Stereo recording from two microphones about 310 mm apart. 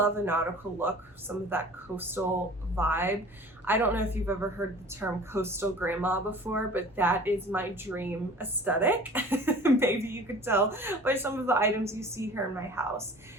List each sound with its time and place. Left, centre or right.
0.0 s a woman's voice: centre